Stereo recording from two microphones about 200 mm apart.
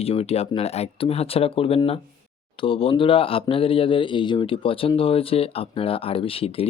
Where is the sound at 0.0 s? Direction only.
30° left (ahead or behind).